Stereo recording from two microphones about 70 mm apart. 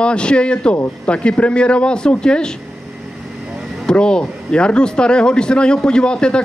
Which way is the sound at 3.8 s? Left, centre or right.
Centre.